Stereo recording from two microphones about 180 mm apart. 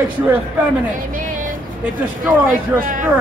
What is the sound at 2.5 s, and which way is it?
Speech, 50° right (ahead or behind).